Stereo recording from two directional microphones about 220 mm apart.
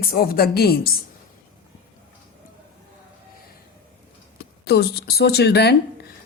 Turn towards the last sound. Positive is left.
turn(degrees=50)  # may be behind; listen again after turning